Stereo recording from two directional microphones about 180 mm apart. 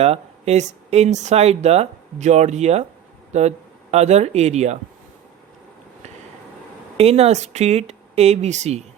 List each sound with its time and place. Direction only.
0.0 s speech: 35° right (ahead or behind)
6.9 s speech: 35° right (ahead or behind)